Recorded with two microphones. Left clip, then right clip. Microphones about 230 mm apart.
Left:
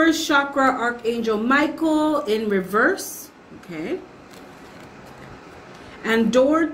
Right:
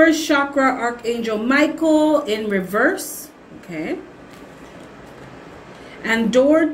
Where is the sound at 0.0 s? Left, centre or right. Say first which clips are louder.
Right 3 dB; centre.